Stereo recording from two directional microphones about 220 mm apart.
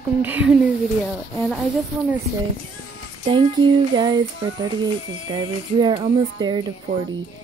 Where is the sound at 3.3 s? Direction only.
20° right (ahead or behind).